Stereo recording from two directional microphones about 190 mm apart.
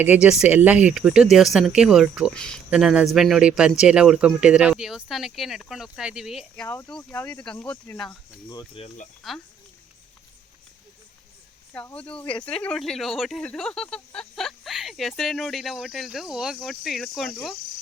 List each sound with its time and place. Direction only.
0.0 s speech: 5° right (ahead or behind)
6.7 s speech: 15° left (ahead or behind)
8.4 s speech: 25° left (ahead or behind)
9.2 s speech: centre (ahead or behind)
11.7 s speech: 5° left (ahead or behind)